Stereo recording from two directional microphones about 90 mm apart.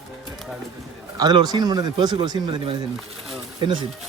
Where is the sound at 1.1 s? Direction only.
50° right (ahead or behind).